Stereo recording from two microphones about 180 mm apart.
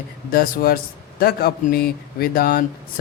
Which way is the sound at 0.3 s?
55° left (ahead or behind).